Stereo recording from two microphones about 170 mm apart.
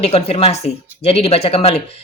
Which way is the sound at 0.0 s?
35° left (ahead or behind).